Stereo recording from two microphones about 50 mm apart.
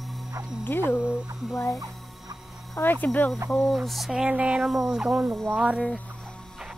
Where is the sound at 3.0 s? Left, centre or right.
Left.